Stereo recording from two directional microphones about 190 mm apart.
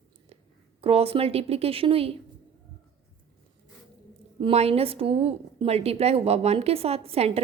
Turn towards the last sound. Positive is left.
turn(degrees=-30)  # may be behind; listen again after turning